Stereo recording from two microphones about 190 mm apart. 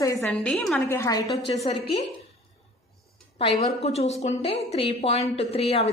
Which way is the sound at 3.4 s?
30° left (ahead or behind).